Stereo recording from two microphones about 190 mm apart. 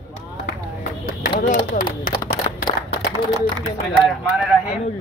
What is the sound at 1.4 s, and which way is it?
Speech, 45° left (ahead or behind).